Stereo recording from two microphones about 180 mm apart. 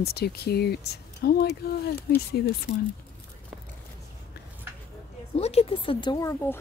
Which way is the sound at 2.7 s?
75° left (ahead or behind).